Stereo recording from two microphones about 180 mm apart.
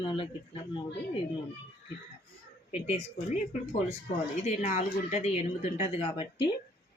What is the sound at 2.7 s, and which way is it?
Speech, 35° left (ahead or behind).